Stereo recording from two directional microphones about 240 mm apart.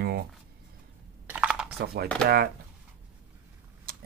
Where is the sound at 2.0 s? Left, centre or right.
Centre.